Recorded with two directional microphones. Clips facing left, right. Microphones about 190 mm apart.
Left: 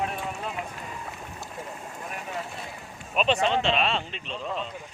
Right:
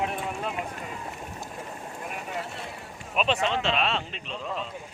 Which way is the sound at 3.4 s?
35° left (ahead or behind).